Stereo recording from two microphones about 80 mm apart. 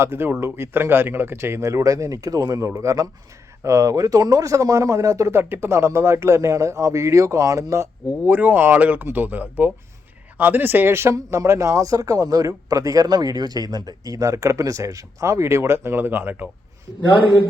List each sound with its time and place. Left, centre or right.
0.0 s speech: right
2.7 s speech: right
8.3 s speech: right